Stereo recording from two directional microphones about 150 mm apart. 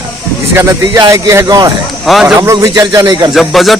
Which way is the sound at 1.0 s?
20° right (ahead or behind).